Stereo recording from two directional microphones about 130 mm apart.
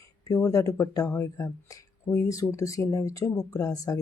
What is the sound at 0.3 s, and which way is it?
Speech, 25° left (ahead or behind).